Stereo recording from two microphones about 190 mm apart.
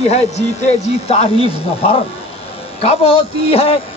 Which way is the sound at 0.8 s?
35° left (ahead or behind).